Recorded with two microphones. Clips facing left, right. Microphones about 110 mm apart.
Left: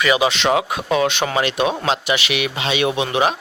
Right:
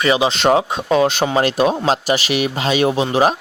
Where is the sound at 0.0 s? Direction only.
30° right (ahead or behind).